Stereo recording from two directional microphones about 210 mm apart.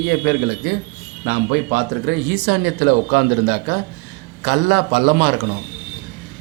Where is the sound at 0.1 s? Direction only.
55° right (ahead or behind).